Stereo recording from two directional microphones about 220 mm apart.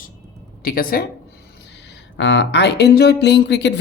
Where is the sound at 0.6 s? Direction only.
40° left (ahead or behind).